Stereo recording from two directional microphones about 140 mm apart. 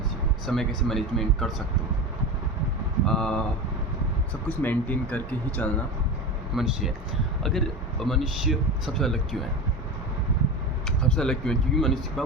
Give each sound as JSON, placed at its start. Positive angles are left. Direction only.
{"t": 0.4, "sound": "speech", "side_deg": 0}
{"t": 3.1, "sound": "speech", "side_deg": 5}
{"t": 4.4, "sound": "speech", "side_deg": 10}
{"t": 6.5, "sound": "speech", "side_deg": -5}
{"t": 11.1, "sound": "speech", "side_deg": 5}